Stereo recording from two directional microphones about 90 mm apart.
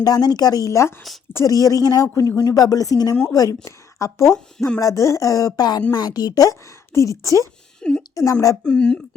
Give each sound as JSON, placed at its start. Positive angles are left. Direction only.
{"t": 0.0, "sound": "a woman's voice", "side_deg": 45}
{"t": 5.9, "sound": "a woman's voice", "side_deg": 50}
{"t": 7.8, "sound": "a sound", "side_deg": 10}
{"t": 8.1, "sound": "a woman's voice", "side_deg": 40}
{"t": 8.6, "sound": "speech", "side_deg": 10}